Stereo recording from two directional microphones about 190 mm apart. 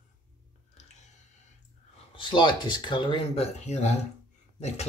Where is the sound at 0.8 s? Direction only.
35° left (ahead or behind).